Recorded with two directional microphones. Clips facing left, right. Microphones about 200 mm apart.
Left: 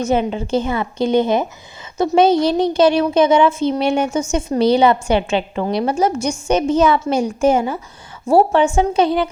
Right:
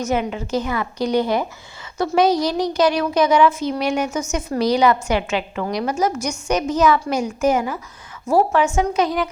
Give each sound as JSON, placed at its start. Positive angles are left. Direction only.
{"t": 0.0, "sound": "speech", "side_deg": 30}